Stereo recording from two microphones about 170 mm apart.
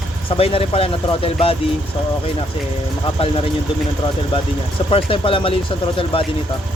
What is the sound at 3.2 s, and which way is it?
Speech, 35° left (ahead or behind).